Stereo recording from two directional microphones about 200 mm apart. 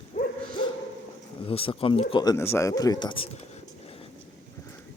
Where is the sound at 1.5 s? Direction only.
25° left (ahead or behind).